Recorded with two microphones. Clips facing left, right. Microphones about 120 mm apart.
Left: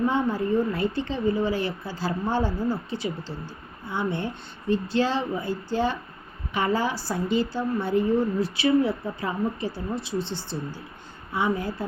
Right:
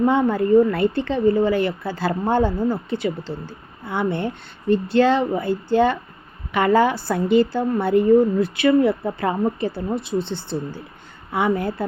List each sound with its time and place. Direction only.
0.0 s speech: 55° right (ahead or behind)